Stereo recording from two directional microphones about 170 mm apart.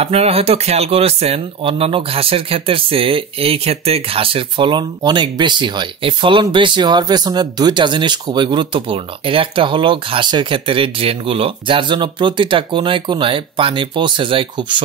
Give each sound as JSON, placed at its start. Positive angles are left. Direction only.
{"t": 0.0, "sound": "speech", "side_deg": -35}